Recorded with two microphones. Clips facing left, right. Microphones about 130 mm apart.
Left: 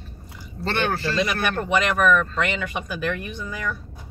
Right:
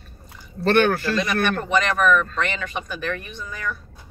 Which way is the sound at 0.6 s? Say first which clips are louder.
Right 7 dB; 55° right (ahead or behind).